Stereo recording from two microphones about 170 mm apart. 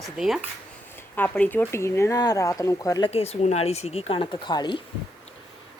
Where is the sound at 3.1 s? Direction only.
35° left (ahead or behind).